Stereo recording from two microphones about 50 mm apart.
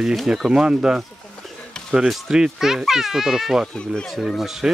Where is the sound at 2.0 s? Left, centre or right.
Centre.